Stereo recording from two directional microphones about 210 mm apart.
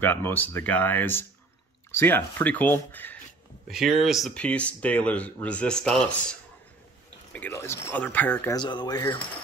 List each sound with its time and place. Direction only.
0.0 s speech: 10° left (ahead or behind)
3.6 s speech: centre (ahead or behind)
7.3 s speech: 10° left (ahead or behind)
8.5 s speech: 20° left (ahead or behind)